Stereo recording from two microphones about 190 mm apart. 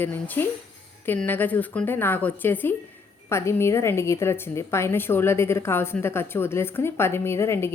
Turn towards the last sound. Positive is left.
turn(degrees=15)  # may be behind; listen again after turning